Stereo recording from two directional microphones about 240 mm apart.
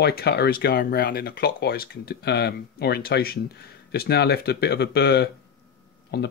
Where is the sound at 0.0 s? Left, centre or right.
Left.